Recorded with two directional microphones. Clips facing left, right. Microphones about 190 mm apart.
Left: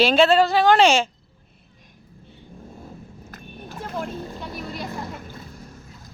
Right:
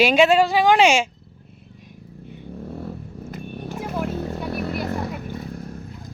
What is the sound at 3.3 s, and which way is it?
Wild animals, 10° right (ahead or behind).